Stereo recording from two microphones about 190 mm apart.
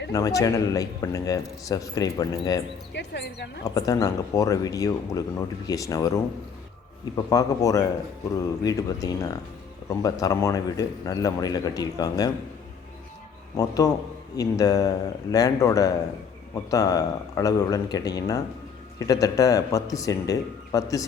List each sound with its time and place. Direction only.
0.1 s a man's voice: 20° left (ahead or behind)
2.9 s speech: 60° left (ahead or behind)
3.6 s a man's voice: 20° left (ahead or behind)
7.3 s a man's voice: 20° left (ahead or behind)
13.6 s a man's voice: 20° left (ahead or behind)